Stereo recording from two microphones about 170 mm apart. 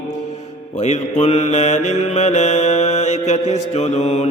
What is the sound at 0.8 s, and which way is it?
Mantra, 40° left (ahead or behind).